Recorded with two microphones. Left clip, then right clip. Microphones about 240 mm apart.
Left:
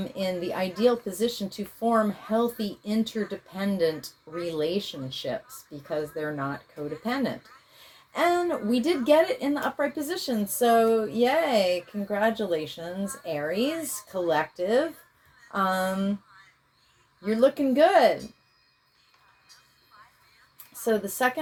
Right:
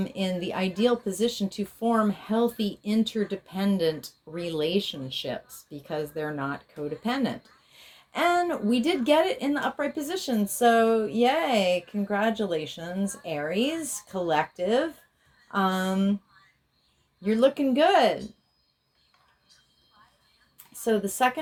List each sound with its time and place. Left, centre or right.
0.0 s a woman's voice: right
17.2 s a woman's voice: right
20.8 s a woman's voice: right